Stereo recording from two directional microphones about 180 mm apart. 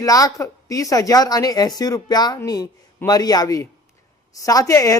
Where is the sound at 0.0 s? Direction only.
20° left (ahead or behind).